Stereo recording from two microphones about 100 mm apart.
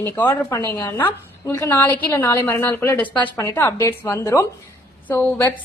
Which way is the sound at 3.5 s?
30° left (ahead or behind).